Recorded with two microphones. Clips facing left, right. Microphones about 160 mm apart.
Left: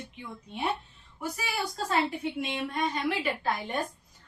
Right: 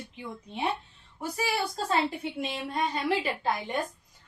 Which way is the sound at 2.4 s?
30° right (ahead or behind).